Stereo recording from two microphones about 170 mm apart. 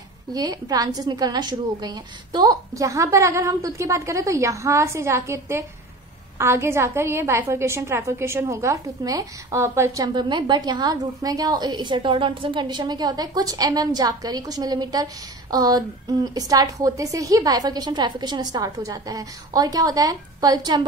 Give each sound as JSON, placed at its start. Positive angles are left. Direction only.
{"t": 0.3, "sound": "a woman's voice", "side_deg": -20}